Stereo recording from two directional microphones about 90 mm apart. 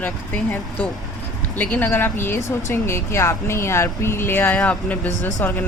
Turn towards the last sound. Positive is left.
turn(degrees=20)  # may be behind; listen again after turning